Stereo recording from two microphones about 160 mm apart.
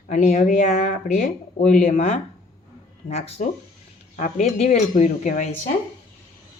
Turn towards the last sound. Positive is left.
turn(degrees=50)  # may be behind; listen again after turning